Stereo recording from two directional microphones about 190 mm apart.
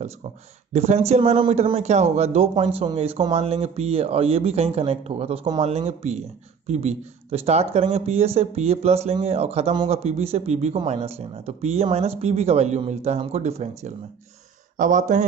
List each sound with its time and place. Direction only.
0.7 s a man's voice: 35° right (ahead or behind)